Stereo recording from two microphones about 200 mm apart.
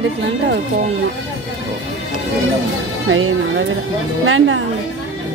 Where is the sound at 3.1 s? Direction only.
85° right.